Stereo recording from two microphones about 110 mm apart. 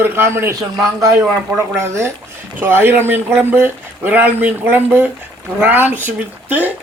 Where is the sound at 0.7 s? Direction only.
30° right (ahead or behind).